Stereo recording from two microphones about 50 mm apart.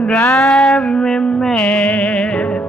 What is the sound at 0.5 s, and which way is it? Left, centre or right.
Music, centre.